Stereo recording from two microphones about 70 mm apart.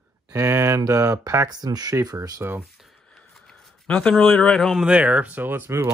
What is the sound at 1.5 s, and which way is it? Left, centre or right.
Speech, right.